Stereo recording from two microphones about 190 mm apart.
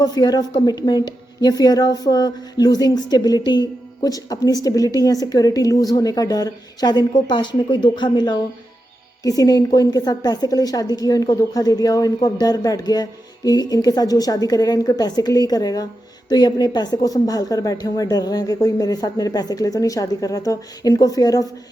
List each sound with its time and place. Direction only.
0.0 s speech: 20° left (ahead or behind)